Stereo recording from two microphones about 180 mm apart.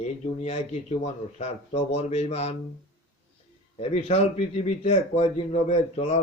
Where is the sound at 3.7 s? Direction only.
35° left (ahead or behind).